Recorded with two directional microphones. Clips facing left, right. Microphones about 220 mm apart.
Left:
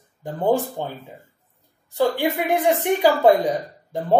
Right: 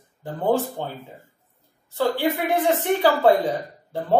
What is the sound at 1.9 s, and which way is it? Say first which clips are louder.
Speech: left 1 dB; 15° left (ahead or behind).